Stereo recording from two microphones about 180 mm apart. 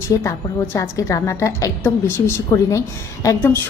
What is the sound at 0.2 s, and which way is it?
A woman's voice, 15° left (ahead or behind).